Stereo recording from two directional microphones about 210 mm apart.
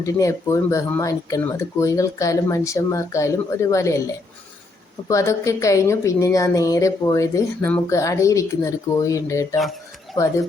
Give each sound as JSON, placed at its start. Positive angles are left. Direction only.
{"t": 0.0, "sound": "speech", "side_deg": 15}